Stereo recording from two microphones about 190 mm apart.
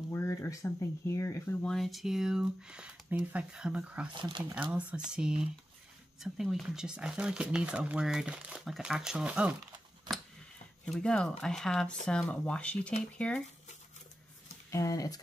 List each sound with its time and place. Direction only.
0.1 s speech: 15° left (ahead or behind); by 4.1 s 5° right (ahead or behind)
4.1 s speech: 25° right (ahead or behind)
4.4 s speech: 5° right (ahead or behind)
11.0 s speech: 5° left (ahead or behind)
14.7 s speech: 15° left (ahead or behind)